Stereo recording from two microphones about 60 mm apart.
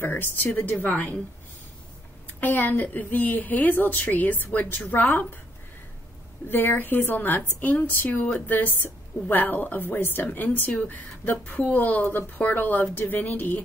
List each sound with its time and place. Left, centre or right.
0.0 s a woman's voice: left
2.4 s a woman's voice: left
6.5 s a woman's voice: left
12.0 s a woman's voice: left
12.4 s a woman's voice: left